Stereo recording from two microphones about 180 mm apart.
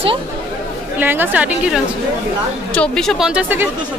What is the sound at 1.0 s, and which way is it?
Speech, 10° right (ahead or behind).